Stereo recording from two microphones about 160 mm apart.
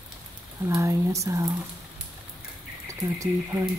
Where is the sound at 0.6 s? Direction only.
20° right (ahead or behind).